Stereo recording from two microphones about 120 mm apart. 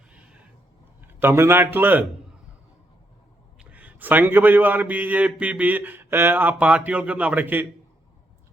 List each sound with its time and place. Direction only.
1.0 s a man's voice: 20° right (ahead or behind)
3.6 s a man's voice: 10° right (ahead or behind)